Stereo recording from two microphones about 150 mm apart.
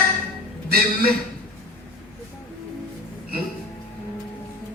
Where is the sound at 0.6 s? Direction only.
85° right.